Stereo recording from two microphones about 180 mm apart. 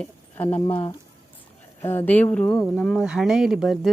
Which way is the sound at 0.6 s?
30° left (ahead or behind).